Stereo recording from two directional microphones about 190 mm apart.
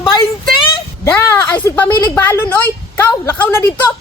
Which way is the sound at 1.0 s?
15° left (ahead or behind).